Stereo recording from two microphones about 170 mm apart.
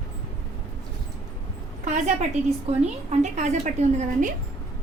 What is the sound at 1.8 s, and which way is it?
A woman's voice, 45° right (ahead or behind).